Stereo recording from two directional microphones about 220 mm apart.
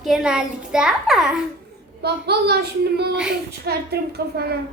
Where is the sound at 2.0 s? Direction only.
50° right (ahead or behind).